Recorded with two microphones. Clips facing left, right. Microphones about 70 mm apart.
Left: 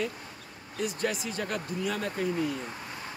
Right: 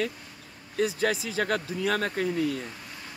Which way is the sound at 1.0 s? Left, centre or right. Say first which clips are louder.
Right 4 dB; right.